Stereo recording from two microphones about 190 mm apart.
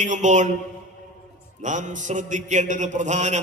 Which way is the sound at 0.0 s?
40° right (ahead or behind).